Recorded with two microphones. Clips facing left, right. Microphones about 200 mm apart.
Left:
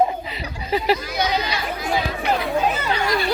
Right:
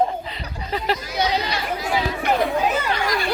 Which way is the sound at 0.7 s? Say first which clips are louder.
Left 4 dB; 10° left (ahead or behind).